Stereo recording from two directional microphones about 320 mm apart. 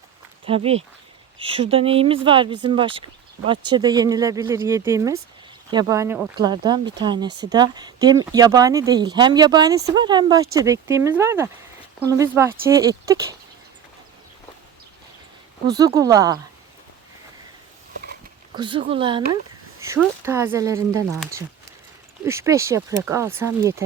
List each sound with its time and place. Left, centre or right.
0.4 s speech: centre
15.6 s speech: centre
18.5 s speech: centre